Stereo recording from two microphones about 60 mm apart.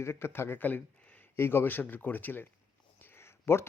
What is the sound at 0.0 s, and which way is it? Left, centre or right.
A man's voice, left.